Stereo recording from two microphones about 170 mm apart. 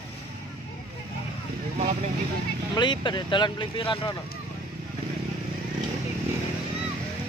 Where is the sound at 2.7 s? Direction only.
25° left (ahead or behind).